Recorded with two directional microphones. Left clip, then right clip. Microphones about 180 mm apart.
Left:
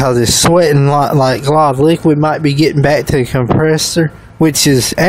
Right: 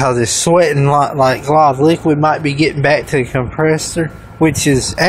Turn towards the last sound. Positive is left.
turn(degrees=35)  # may be behind; listen again after turning